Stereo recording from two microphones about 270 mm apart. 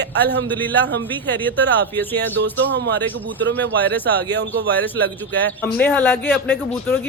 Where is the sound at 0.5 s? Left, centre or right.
Centre.